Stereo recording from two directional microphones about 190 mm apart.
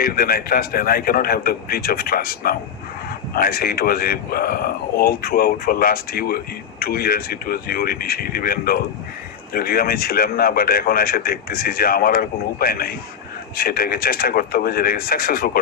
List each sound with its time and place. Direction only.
0.0 s speech: 50° left (ahead or behind)